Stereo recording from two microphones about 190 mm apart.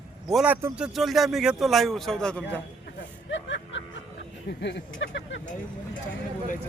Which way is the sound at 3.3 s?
75° left (ahead or behind).